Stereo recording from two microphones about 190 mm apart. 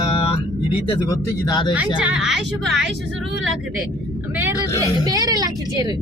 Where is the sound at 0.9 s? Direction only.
20° left (ahead or behind).